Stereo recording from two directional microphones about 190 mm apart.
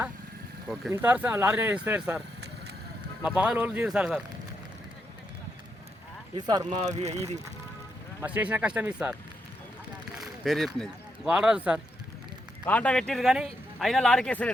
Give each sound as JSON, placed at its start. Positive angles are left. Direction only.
{"t": 0.9, "sound": "speech", "side_deg": -10}
{"t": 3.2, "sound": "speech", "side_deg": -5}
{"t": 6.3, "sound": "speech", "side_deg": -20}
{"t": 6.8, "sound": "speech", "side_deg": -35}
{"t": 8.2, "sound": "speech", "side_deg": -10}
{"t": 10.2, "sound": "a sound", "side_deg": 0}
{"t": 10.8, "sound": "speech", "side_deg": -5}
{"t": 12.6, "sound": "speech", "side_deg": 5}